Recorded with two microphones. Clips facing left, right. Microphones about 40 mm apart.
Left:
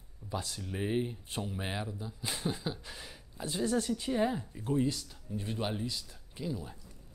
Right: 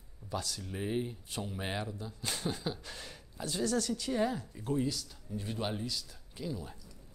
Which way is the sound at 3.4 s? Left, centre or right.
Left.